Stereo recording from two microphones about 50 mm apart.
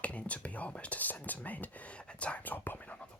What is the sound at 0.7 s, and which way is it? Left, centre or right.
Whispering, left.